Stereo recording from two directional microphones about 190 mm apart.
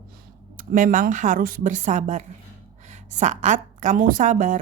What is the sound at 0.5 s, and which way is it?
A woman's voice, 45° right (ahead or behind).